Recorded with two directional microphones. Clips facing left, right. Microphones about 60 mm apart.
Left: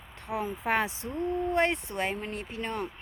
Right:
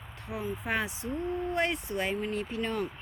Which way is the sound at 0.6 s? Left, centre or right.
Left.